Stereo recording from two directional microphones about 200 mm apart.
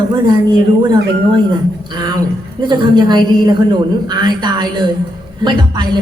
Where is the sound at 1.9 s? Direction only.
20° right (ahead or behind).